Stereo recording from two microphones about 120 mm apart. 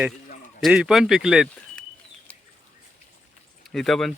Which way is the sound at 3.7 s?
5° left (ahead or behind).